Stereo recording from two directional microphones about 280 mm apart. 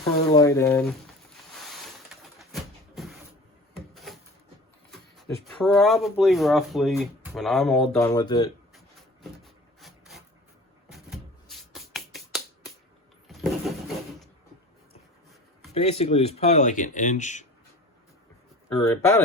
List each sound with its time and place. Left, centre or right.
0.3 s speech: centre
1.5 s a sound: centre
4.9 s speech: centre
8.1 s speech: centre
8.7 s a sound: centre
9.8 s filing: centre
10.9 s finger snapping: centre
13.2 s vehicle: centre
15.7 s speech: left
18.7 s speech: centre